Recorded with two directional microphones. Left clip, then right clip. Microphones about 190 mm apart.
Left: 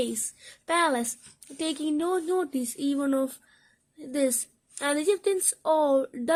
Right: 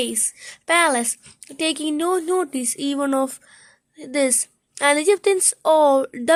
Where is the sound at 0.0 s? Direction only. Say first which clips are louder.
Right 5 dB; 15° right (ahead or behind).